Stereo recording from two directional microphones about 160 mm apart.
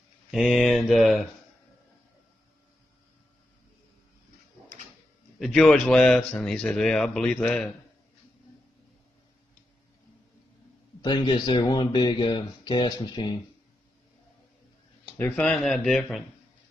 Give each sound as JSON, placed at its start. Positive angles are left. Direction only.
{"t": 0.3, "sound": "speech", "side_deg": 0}
{"t": 5.4, "sound": "speech", "side_deg": 5}
{"t": 11.0, "sound": "speech", "side_deg": 30}
{"t": 15.1, "sound": "speech", "side_deg": 10}